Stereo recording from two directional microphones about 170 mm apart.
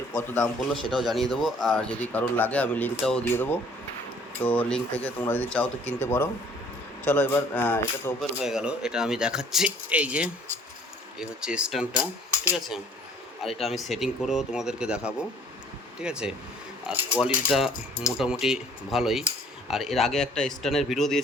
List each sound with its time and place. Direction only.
0.2 s speech: 15° left (ahead or behind)
0.7 s speech: centre (ahead or behind)
8.2 s speech: 5° right (ahead or behind)